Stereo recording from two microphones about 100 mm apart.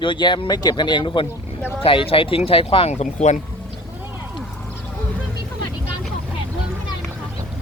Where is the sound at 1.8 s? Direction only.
65° left (ahead or behind); by 3.1 s 80° left.